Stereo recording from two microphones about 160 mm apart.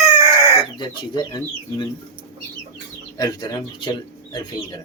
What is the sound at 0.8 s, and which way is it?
Speech, 25° left (ahead or behind).